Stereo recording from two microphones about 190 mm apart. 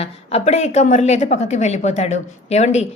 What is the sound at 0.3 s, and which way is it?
A woman's voice, 35° left (ahead or behind).